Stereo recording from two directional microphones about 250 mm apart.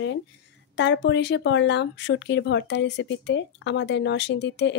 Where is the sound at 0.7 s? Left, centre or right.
Left.